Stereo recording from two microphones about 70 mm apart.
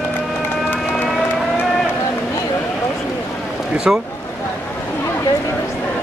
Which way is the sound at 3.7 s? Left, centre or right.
Centre.